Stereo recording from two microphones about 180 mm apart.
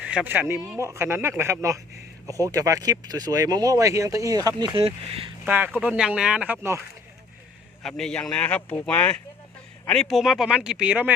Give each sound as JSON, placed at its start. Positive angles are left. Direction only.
{"t": 0.0, "sound": "speech", "side_deg": -5}
{"t": 5.5, "sound": "speech", "side_deg": -10}
{"t": 7.8, "sound": "speech", "side_deg": 5}